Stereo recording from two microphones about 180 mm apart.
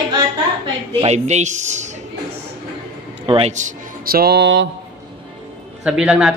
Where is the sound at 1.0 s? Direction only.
40° right (ahead or behind).